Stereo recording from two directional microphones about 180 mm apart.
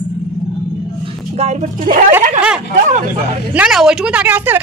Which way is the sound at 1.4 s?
40° right (ahead or behind).